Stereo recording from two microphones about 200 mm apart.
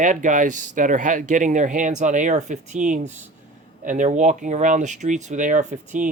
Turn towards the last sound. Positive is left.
turn(degrees=-40)  # may be behind; listen again after turning